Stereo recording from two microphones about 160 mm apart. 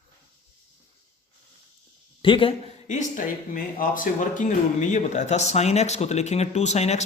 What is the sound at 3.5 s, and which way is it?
Speech, 60° left (ahead or behind).